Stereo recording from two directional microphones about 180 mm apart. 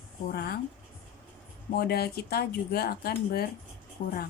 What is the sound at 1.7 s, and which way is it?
A woman's voice, 60° left (ahead or behind).